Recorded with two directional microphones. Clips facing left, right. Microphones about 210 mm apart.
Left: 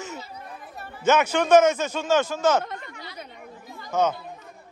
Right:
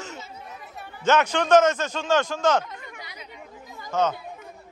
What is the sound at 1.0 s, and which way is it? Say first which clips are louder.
A man's voice: left 1 dB; 5° left (ahead or behind).